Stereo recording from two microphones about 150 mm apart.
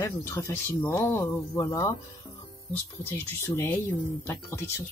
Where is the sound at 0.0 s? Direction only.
20° left (ahead or behind).